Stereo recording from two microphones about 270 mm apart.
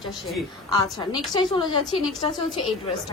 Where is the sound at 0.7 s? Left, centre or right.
Centre.